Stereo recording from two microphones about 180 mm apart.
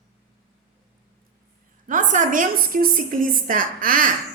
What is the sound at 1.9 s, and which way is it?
A woman's voice, 45° right (ahead or behind).